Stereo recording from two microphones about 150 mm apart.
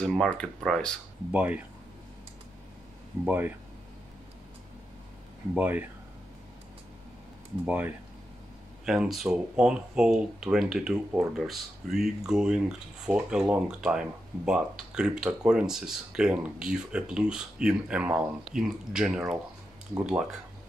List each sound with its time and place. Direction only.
0.0 s speech: 5° left (ahead or behind)
1.3 s speech: 10° right (ahead or behind)
3.3 s speech: 10° right (ahead or behind)
5.5 s speech: 10° right (ahead or behind)
7.6 s speech: 10° right (ahead or behind)